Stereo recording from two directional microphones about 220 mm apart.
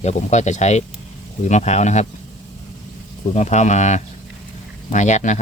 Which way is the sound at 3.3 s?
30° left (ahead or behind).